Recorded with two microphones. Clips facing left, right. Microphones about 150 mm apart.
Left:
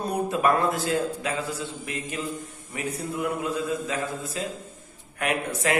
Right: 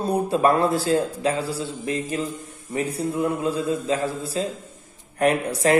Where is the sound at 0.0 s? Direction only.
30° right (ahead or behind).